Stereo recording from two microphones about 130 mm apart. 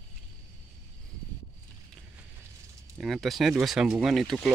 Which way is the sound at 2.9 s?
Centre (ahead or behind).